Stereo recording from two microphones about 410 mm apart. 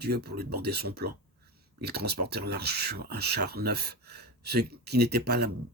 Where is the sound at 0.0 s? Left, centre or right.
Right.